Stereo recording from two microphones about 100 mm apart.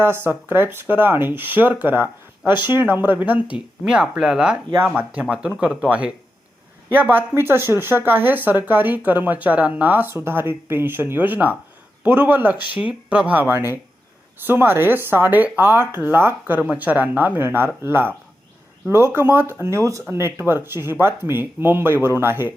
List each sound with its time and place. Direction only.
0.0 s speech: 25° right (ahead or behind)